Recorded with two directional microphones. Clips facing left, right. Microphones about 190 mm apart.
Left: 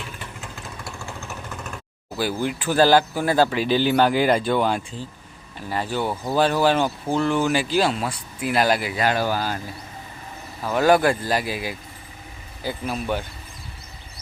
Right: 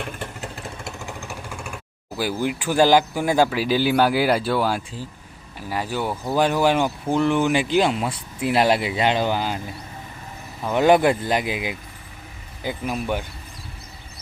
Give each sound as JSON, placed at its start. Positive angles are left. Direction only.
{"t": 0.0, "sound": "vehicle", "side_deg": -45}
{"t": 0.9, "sound": "vehicle", "side_deg": -20}
{"t": 2.4, "sound": "speech", "side_deg": -10}
{"t": 10.6, "sound": "speech", "side_deg": -20}